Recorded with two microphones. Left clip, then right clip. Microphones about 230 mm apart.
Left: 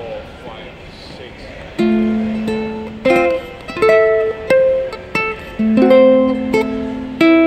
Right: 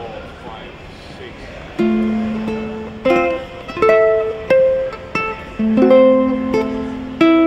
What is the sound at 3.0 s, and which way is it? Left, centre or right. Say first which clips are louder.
Music: left 2 dB; left.